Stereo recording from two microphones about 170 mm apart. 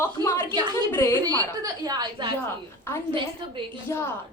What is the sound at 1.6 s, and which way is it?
Speech, 20° right (ahead or behind).